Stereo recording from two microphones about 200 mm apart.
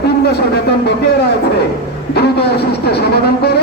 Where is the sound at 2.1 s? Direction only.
55° left (ahead or behind).